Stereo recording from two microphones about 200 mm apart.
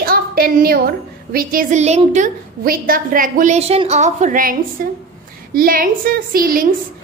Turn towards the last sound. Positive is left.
turn(degrees=-45)  # may be behind; listen again after turning